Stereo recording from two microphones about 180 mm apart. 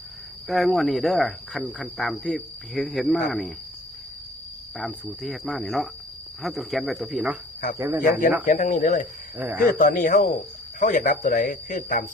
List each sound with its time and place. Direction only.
0.4 s speech: centre (ahead or behind)
4.8 s speech: centre (ahead or behind)
7.8 s speech: 15° right (ahead or behind)
8.4 s speech: 45° left (ahead or behind)